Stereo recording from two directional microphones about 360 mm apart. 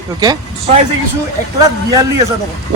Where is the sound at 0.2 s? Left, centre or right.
Centre.